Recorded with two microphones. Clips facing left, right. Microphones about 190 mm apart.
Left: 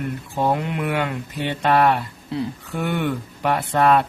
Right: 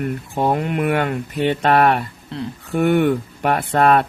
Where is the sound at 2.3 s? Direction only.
5° left (ahead or behind).